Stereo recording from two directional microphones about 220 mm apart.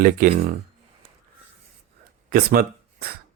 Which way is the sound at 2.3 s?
45° right (ahead or behind).